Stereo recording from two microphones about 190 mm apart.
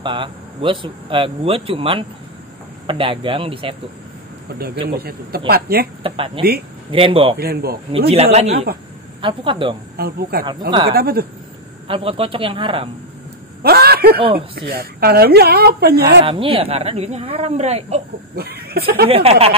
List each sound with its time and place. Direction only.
0.0 s speech: 25° right (ahead or behind)
4.5 s speech: 55° right (ahead or behind)
6.0 s speech: 30° right (ahead or behind)
7.3 s speech: 55° right (ahead or behind)
8.1 s speech: 35° right (ahead or behind)
9.9 s speech: 55° right (ahead or behind)
11.9 s speech: 30° right (ahead or behind)
13.6 s speech: 55° right (ahead or behind)
16.3 s speech: 30° right (ahead or behind)
18.3 s speech: 55° right (ahead or behind)
19.0 s speech: 30° right (ahead or behind)